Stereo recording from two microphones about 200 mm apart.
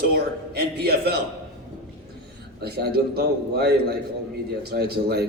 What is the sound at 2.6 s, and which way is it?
A man's voice, 55° right (ahead or behind).